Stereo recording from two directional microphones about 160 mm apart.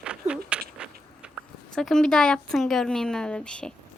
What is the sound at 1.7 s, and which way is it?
A woman's voice, 5° left (ahead or behind).